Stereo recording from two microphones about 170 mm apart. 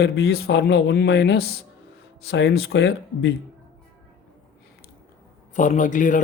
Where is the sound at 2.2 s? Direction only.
85° left.